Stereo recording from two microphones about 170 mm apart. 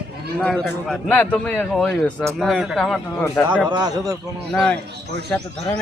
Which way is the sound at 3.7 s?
25° right (ahead or behind).